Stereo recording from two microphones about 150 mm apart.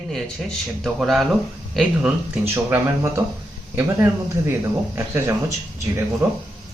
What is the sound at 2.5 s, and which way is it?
Speech, 15° right (ahead or behind).